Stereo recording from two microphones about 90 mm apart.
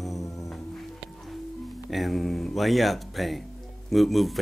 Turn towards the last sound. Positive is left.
turn(degrees=0)  # may be behind; listen again after turning